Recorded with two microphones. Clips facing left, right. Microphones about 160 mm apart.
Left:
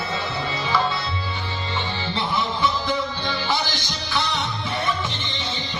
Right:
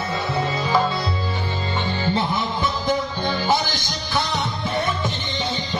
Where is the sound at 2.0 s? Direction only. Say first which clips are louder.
Right 3 dB; 45° right (ahead or behind).